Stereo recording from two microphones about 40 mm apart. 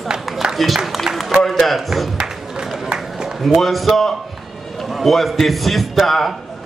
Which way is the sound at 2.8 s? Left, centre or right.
Centre.